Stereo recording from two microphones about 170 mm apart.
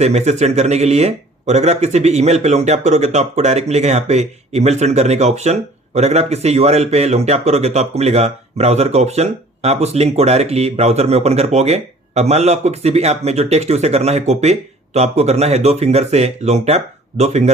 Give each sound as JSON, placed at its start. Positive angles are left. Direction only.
{"t": 0.0, "sound": "speech", "side_deg": -40}